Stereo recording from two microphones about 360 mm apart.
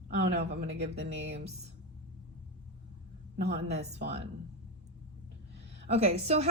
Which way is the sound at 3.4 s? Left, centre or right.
Right.